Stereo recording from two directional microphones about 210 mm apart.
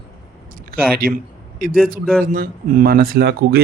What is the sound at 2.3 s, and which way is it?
Speech, 40° right (ahead or behind).